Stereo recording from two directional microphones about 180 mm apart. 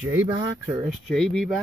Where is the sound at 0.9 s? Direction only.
5° left (ahead or behind).